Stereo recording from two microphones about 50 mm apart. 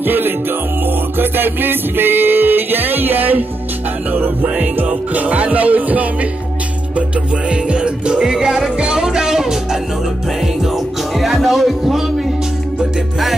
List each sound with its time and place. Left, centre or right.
0.0 s music: right
4.8 s music: right
8.2 s music: centre
11.1 s music: centre